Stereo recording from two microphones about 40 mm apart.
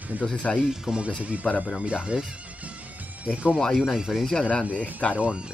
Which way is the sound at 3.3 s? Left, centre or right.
Right.